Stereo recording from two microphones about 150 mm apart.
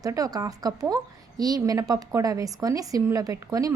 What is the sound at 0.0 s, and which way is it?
A woman's voice, 25° right (ahead or behind).